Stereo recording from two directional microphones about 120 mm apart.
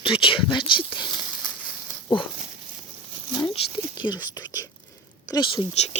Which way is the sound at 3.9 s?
35° left (ahead or behind).